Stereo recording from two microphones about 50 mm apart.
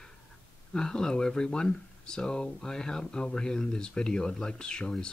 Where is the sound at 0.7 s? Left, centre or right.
Centre.